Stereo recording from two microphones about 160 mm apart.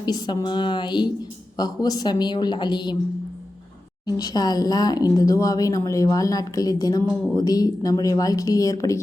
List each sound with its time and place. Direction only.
0.0 s a woman's voice: 25° left (ahead or behind)
4.0 s a woman's voice: 25° left (ahead or behind)